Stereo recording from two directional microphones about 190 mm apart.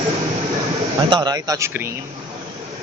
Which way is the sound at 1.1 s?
20° right (ahead or behind).